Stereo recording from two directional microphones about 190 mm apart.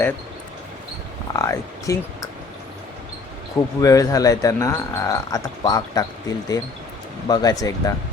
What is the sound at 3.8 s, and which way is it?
Speech, 15° left (ahead or behind).